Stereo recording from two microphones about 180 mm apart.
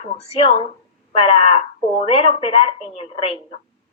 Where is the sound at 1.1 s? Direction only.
30° left (ahead or behind).